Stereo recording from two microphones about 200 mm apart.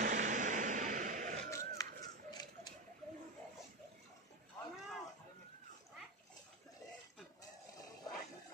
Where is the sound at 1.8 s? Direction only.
20° left (ahead or behind).